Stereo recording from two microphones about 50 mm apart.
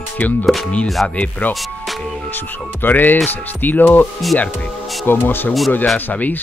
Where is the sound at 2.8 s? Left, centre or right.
Left.